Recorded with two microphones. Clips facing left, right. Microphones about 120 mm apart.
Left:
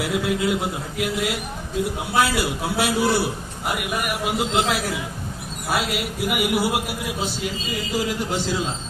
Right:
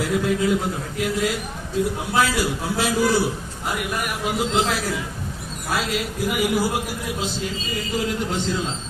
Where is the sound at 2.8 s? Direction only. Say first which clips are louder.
Even; 65° left (ahead or behind).